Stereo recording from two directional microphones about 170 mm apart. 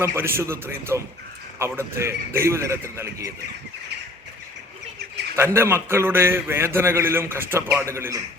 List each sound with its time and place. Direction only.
0.0 s a man's voice: 15° right (ahead or behind)
5.5 s a man's voice: 15° right (ahead or behind)